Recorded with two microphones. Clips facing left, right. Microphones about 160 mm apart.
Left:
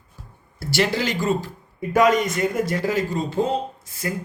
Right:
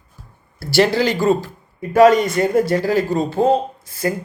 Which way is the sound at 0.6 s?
35° right (ahead or behind).